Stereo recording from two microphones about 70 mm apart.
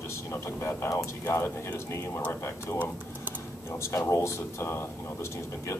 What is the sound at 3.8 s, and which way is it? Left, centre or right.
Speech, left.